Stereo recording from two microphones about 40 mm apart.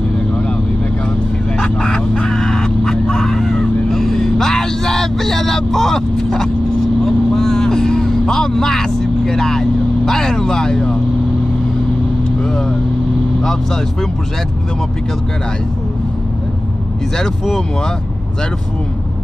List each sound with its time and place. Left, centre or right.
1.6 s fowl: centre
7.1 s vehicle: centre
12.4 s vehicle: centre